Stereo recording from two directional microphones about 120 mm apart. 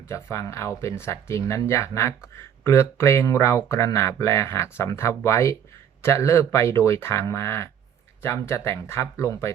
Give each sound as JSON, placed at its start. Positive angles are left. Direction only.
{"t": 0.0, "sound": "a man's voice", "side_deg": 25}